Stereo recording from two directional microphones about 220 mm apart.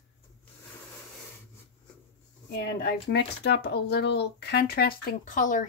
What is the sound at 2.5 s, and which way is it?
Speech, 50° left (ahead or behind).